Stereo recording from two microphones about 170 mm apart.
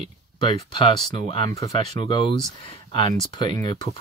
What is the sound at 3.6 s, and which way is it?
Speech, 25° left (ahead or behind).